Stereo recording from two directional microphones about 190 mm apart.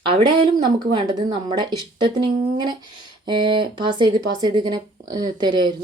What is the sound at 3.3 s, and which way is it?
Speech, 25° right (ahead or behind).